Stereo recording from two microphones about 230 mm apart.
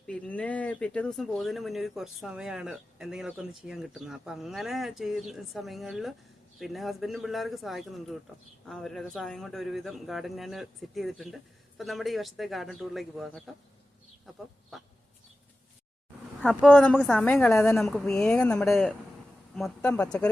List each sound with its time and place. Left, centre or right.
0.1 s speech: centre
14.7 s speech: centre
16.4 s speech: centre